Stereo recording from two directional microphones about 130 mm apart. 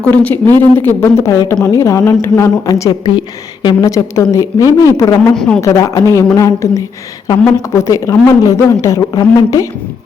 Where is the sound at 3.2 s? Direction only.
40° left (ahead or behind).